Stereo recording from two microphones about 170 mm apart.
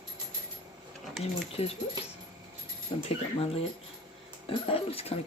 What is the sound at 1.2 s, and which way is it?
Speech, 35° left (ahead or behind).